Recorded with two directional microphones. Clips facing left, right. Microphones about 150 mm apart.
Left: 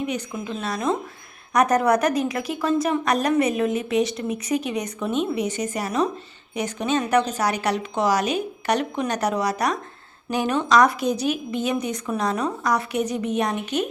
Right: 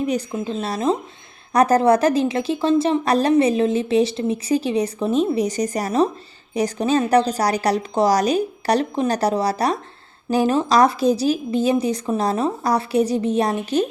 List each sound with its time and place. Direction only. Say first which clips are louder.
0.0 s a woman's voice: right 5 dB; 35° right (ahead or behind)